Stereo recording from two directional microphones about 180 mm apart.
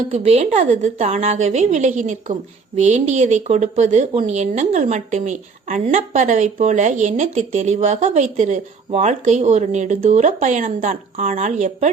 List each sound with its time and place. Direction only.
0.1 s speech: 40° right (ahead or behind)